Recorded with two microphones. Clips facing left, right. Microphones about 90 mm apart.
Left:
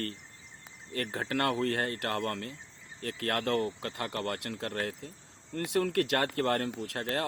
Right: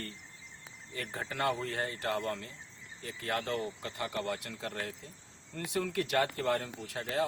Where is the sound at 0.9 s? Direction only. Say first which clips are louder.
Left 5 dB; 70° left (ahead or behind).